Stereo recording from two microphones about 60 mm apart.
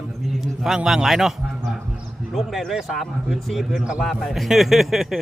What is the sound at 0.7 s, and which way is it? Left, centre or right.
Speech, centre.